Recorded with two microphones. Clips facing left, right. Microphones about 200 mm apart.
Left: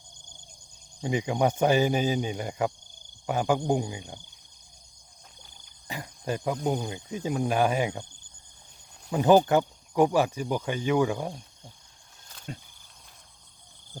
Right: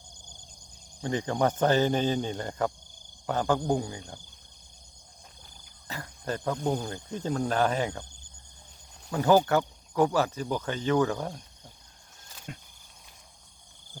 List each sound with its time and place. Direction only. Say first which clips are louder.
1.0 s speech: left 1 dB; 10° left (ahead or behind)
5.9 s speech: left 2 dB; 15° left (ahead or behind)
9.1 s speech: left 3 dB; 20° left (ahead or behind)
12.5 s speech: left 3 dB; 30° left (ahead or behind)